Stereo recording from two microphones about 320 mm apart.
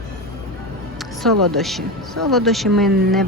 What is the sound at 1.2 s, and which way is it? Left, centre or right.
Speech, centre.